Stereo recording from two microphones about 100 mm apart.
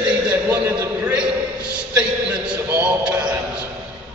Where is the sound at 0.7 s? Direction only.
30° right (ahead or behind).